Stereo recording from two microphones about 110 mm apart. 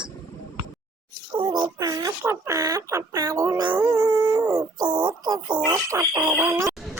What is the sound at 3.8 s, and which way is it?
Dog, 30° right (ahead or behind).